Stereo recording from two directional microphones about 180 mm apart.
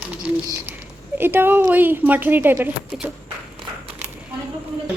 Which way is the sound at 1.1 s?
10° right (ahead or behind).